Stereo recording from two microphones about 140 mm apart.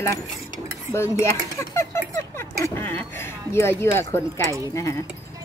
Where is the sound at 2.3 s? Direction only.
20° left (ahead or behind).